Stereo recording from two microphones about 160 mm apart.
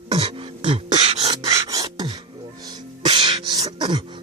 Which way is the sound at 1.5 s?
20° right (ahead or behind).